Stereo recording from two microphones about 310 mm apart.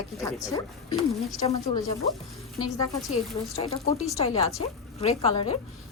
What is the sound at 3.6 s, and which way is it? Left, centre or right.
Speech, centre.